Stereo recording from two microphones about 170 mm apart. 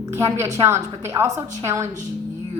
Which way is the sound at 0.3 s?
15° right (ahead or behind).